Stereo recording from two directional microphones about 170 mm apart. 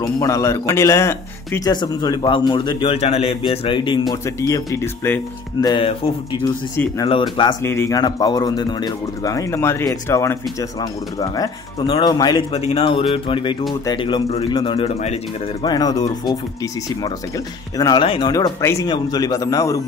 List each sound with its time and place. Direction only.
0.0 s speech: 20° left (ahead or behind)
5.7 s speech: 30° left (ahead or behind)
7.1 s speech: 30° left (ahead or behind)
7.6 s speech: 15° left (ahead or behind)
12.5 s speech: 35° left (ahead or behind)
17.7 s speech: 25° left (ahead or behind)
18.3 s speech: 20° left (ahead or behind)